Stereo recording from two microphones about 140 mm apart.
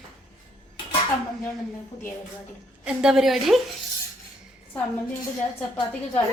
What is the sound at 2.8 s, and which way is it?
Speech, 5° right (ahead or behind).